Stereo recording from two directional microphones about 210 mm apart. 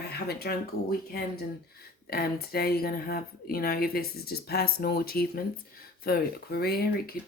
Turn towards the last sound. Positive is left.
turn(degrees=45)  # may be behind; listen again after turning